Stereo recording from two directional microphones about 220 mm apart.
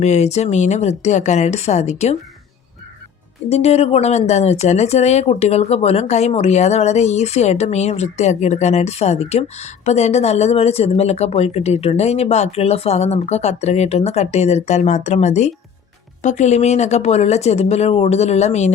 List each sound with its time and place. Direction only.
0.0 s speech: 30° left (ahead or behind)
3.5 s speech: 30° left (ahead or behind)